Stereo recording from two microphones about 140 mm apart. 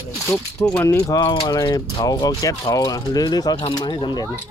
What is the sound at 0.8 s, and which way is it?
Speech, 25° left (ahead or behind).